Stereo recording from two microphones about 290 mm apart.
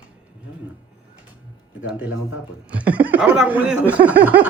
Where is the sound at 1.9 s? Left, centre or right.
Centre.